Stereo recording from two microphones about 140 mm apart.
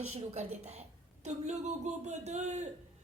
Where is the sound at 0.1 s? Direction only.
50° right (ahead or behind).